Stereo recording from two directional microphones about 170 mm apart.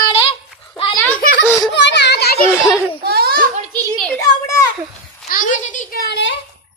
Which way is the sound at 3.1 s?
65° right (ahead or behind).